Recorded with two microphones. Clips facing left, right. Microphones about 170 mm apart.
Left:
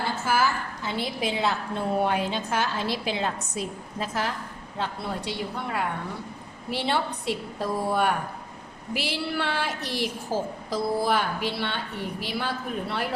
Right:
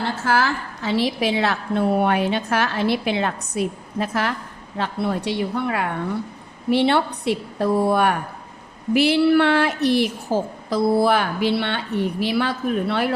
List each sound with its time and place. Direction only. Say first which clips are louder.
0.0 s a woman's voice: right 4 dB; 90° right; by 13.1 s 70° right (ahead or behind)